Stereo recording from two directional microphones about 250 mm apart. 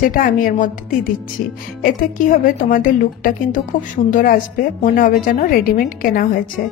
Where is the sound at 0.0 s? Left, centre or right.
Left.